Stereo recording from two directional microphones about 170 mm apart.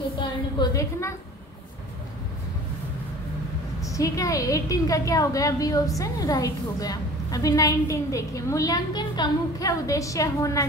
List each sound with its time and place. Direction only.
0.6 s a woman's voice: 20° left (ahead or behind)
3.8 s a woman's voice: 20° left (ahead or behind)